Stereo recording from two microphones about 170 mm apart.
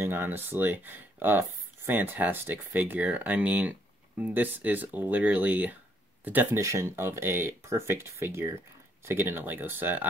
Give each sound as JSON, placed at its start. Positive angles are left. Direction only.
{"t": 0.0, "sound": "speech", "side_deg": -10}